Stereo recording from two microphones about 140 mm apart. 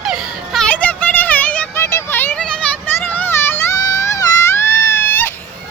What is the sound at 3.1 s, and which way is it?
Baby cry, 15° left (ahead or behind).